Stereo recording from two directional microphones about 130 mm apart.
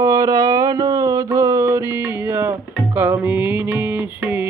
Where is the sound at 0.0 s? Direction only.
30° right (ahead or behind).